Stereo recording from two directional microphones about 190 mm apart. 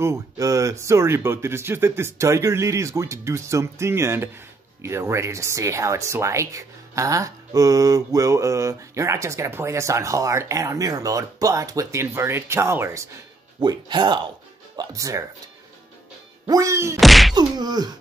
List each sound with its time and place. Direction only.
0.0 s speech: 15° right (ahead or behind)
16.4 s speech: 15° right (ahead or behind)
17.0 s whack: centre (ahead or behind)
17.4 s speech: 20° right (ahead or behind)